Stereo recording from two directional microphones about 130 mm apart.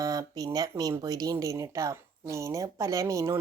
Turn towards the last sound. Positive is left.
turn(degrees=-25)  # may be behind; listen again after turning